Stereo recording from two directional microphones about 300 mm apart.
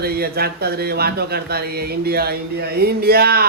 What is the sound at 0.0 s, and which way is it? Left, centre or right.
Speech, right.